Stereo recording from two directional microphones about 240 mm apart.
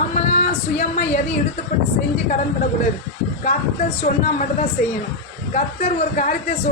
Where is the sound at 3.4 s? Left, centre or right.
Left.